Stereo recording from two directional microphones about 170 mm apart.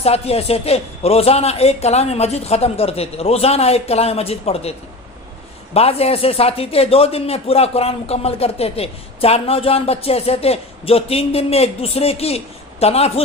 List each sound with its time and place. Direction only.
0.0 s speech: 35° left (ahead or behind)
5.7 s speech: 35° left (ahead or behind)